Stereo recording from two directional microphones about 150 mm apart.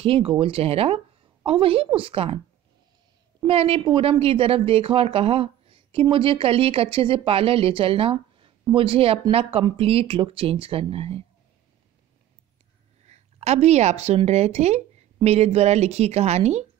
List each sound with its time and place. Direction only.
0.0 s speech: 40° right (ahead or behind)
3.4 s speech: 40° right (ahead or behind)
13.0 s a woman's voice: 45° right (ahead or behind)